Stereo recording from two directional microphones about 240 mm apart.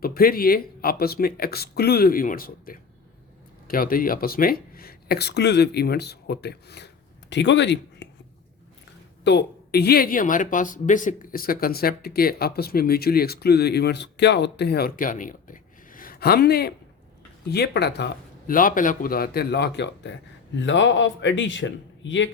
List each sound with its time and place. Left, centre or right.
0.0 s a woman's voice: left
9.2 s a woman's voice: left